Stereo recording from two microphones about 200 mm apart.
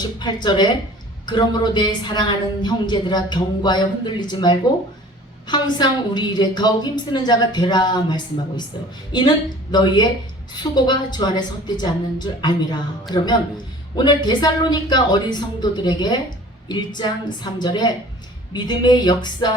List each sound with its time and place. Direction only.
0.0 s a woman's voice: 20° left (ahead or behind)